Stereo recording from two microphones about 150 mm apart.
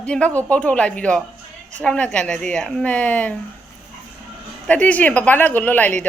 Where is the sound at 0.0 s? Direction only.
5° left (ahead or behind).